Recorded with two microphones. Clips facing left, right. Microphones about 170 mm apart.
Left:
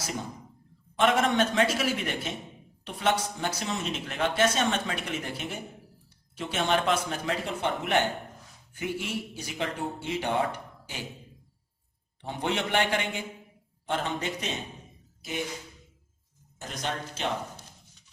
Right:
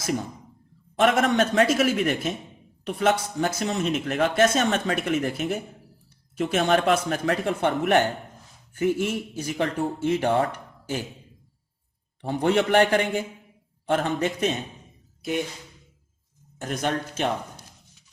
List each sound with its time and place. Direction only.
0.9 s speech: 45° right (ahead or behind)
6.6 s speech: 60° right (ahead or behind)
12.2 s speech: 45° right (ahead or behind)
13.8 s speech: 55° right (ahead or behind)
16.6 s speech: 55° right (ahead or behind)